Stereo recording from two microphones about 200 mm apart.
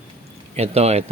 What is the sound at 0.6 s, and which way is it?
Speech, 30° right (ahead or behind).